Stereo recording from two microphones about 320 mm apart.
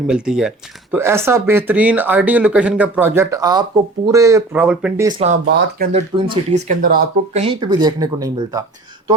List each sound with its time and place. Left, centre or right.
0.1 s speech: centre
5.2 s speech: right
5.9 s speech: centre